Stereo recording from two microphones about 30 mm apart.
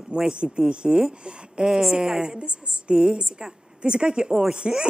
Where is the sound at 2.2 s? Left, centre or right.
Right.